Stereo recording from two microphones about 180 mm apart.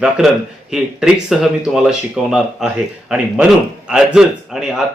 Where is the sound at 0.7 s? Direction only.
5° right (ahead or behind).